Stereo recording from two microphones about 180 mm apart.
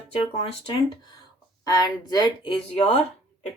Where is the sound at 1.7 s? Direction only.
20° left (ahead or behind).